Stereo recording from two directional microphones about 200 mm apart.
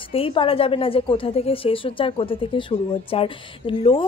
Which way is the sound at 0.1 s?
25° left (ahead or behind).